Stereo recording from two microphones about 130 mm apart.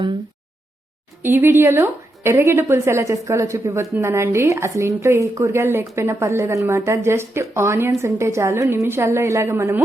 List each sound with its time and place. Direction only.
1.2 s speech: 15° right (ahead or behind)